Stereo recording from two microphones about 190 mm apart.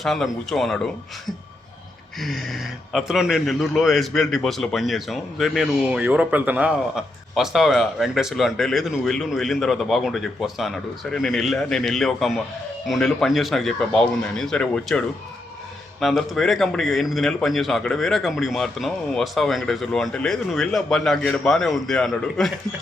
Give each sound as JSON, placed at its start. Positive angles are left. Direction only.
{"t": 0.0, "sound": "speech", "side_deg": 0}
{"t": 2.2, "sound": "speech", "side_deg": 0}